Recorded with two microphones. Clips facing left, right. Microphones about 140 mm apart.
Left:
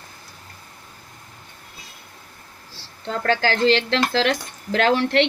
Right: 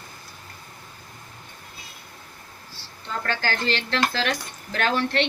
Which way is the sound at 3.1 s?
90° left.